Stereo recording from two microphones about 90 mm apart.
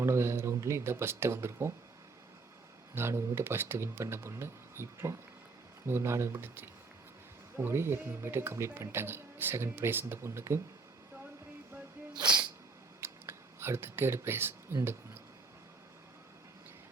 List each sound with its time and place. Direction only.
0.0 s speech: 30° right (ahead or behind)
2.9 s speech: 30° right (ahead or behind)
12.1 s speech: 50° right (ahead or behind)
13.0 s a sound: 30° right (ahead or behind)